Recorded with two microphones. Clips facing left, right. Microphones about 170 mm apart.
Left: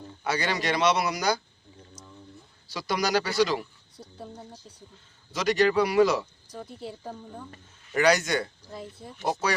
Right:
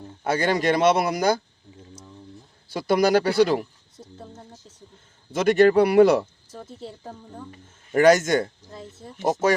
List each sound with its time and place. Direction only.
0.3 s speech: 50° right (ahead or behind)
2.6 s speech: 55° right (ahead or behind)
4.0 s speech: 5° left (ahead or behind)
5.3 s speech: 55° right (ahead or behind)
6.7 s speech: 25° right (ahead or behind)
7.0 s speech: centre (ahead or behind)
7.9 s speech: 45° right (ahead or behind)